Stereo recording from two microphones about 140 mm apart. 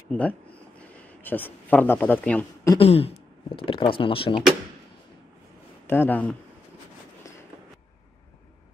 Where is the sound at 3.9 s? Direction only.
40° left (ahead or behind).